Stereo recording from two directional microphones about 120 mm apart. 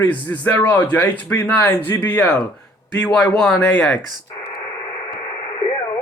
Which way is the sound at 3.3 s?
15° left (ahead or behind).